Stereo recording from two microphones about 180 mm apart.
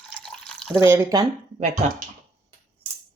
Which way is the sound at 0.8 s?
15° right (ahead or behind).